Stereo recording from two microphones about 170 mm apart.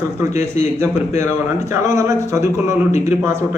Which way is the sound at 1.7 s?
15° right (ahead or behind).